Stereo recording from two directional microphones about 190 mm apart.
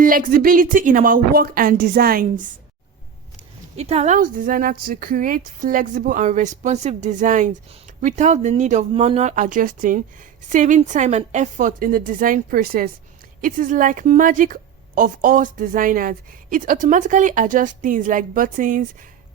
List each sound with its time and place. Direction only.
0.0 s a woman's voice: 45° right (ahead or behind)
3.8 s a woman's voice: 35° right (ahead or behind)